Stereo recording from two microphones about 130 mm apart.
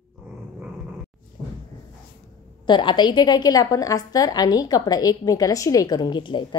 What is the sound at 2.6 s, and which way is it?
A woman's voice, 35° left (ahead or behind).